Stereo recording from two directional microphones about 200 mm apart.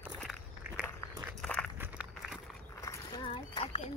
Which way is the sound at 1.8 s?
5° right (ahead or behind).